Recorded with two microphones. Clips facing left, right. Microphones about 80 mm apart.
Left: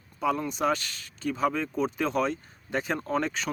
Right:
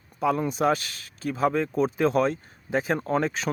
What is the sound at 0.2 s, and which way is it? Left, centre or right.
Speech, centre.